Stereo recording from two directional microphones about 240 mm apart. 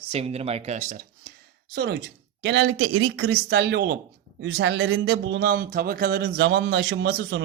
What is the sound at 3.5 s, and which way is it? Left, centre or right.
Speech, right.